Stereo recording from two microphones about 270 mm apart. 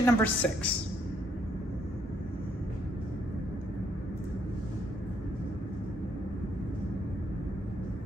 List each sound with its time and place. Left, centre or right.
0.0 s a woman's voice: centre